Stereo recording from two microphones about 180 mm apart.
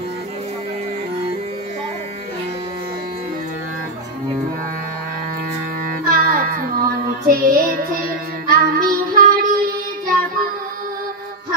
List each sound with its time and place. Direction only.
6.0 s music: 50° right (ahead or behind)